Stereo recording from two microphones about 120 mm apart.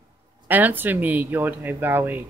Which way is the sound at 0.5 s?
15° right (ahead or behind).